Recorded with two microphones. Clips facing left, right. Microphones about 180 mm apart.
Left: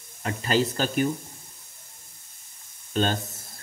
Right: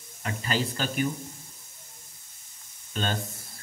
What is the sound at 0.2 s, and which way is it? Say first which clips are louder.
Speech: left 5 dB; 40° left (ahead or behind).